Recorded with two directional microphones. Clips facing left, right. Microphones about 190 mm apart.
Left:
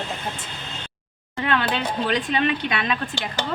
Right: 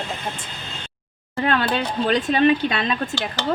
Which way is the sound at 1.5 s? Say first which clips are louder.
Right 2 dB; 40° right (ahead or behind).